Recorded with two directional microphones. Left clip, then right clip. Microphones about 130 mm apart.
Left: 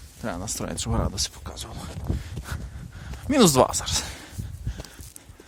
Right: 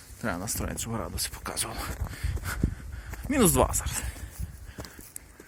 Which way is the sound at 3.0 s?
40° left (ahead or behind).